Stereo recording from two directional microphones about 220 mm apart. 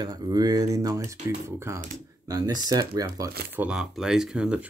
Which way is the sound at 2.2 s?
15° right (ahead or behind).